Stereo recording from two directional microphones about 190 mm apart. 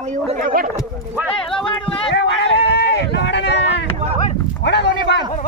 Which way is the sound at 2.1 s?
65° left (ahead or behind).